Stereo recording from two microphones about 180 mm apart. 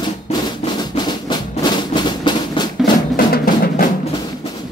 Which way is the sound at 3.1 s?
55° left (ahead or behind).